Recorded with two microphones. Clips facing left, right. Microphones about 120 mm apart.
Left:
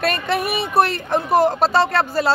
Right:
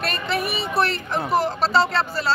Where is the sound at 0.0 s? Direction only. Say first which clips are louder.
Left 4 dB; 55° left (ahead or behind).